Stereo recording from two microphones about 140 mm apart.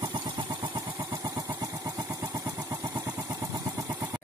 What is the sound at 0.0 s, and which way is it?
Vehicle, 35° right (ahead or behind).